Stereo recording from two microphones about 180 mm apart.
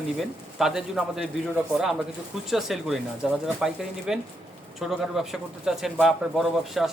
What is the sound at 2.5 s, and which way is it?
Speech, centre (ahead or behind).